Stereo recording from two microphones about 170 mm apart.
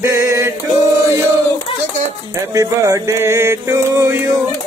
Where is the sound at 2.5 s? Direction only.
20° right (ahead or behind).